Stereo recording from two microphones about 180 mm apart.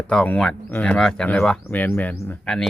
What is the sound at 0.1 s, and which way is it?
Speech, 5° left (ahead or behind).